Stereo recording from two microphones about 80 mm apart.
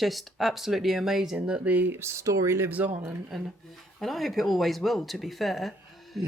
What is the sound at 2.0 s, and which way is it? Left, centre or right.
Speech, right.